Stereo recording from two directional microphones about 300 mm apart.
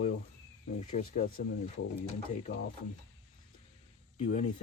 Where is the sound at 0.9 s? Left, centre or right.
Left.